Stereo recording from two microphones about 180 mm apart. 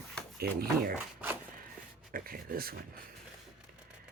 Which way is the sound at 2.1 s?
55° right (ahead or behind).